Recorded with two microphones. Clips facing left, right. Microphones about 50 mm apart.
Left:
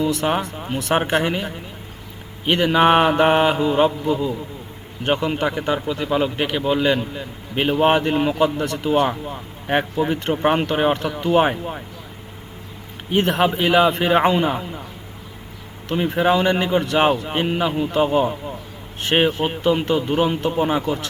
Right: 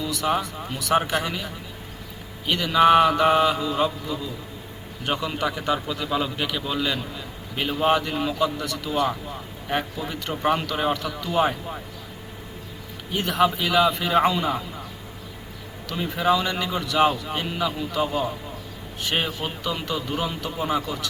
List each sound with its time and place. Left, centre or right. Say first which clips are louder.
0.0 s a man's voice: left 4 dB; left
13.1 s a man's voice: left 4 dB; left
15.9 s a man's voice: left 4 dB; left